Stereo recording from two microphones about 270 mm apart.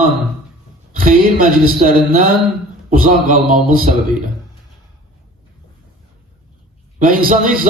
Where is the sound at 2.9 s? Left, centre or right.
Right.